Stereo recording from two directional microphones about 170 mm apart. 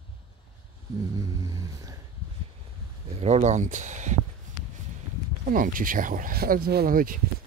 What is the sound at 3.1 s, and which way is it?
Speech, 40° right (ahead or behind).